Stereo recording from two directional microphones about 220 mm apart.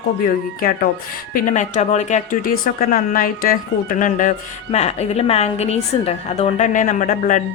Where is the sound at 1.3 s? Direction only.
35° left (ahead or behind).